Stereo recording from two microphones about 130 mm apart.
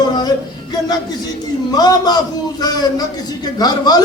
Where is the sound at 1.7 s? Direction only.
30° left (ahead or behind).